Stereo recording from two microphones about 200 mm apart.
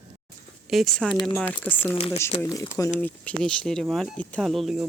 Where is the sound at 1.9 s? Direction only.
30° left (ahead or behind).